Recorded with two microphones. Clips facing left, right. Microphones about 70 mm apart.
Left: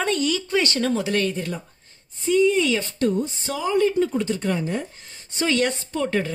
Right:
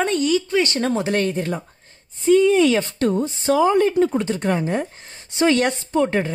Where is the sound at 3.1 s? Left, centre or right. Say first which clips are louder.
Right 7 dB; right.